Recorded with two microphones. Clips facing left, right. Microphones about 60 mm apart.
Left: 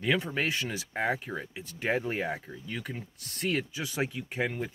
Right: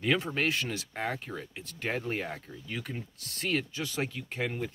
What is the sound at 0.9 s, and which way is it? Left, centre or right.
Speech, centre.